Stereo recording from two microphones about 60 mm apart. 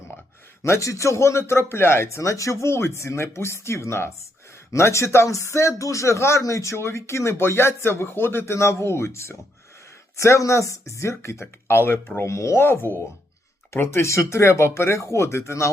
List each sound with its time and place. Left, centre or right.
0.6 s a man's voice: left
12.2 s a man's voice: left